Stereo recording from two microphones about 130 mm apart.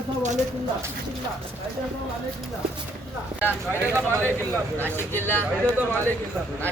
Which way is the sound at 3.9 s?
20° right (ahead or behind).